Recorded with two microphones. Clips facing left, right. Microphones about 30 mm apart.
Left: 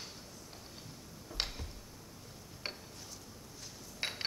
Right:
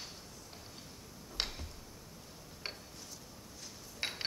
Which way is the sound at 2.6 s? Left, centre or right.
Centre.